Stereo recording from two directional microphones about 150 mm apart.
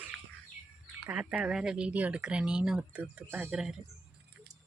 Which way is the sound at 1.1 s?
10° right (ahead or behind).